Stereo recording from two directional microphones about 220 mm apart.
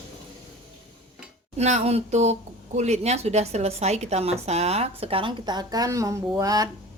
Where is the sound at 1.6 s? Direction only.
30° right (ahead or behind).